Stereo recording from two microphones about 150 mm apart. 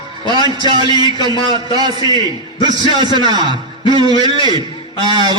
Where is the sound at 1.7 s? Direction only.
25° right (ahead or behind).